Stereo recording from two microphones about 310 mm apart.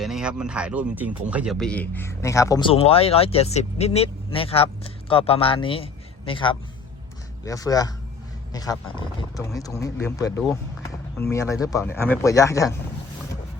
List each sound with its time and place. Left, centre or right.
0.0 s speech: centre